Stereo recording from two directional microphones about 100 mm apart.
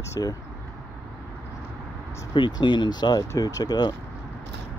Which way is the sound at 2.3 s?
50° left (ahead or behind).